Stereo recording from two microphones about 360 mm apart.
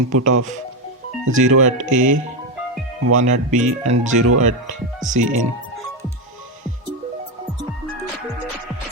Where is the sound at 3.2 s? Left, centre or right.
Right.